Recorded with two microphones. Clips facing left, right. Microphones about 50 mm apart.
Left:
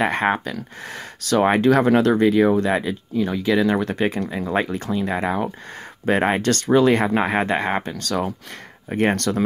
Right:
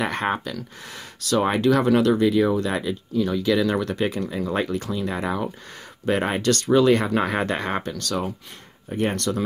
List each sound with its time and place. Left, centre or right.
0.0 s speech: left
1.5 s speech: left
6.0 s speech: left
7.2 s speech: left